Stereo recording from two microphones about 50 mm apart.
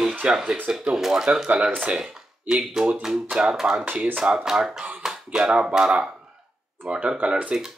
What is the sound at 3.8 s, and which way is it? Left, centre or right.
Speech, right.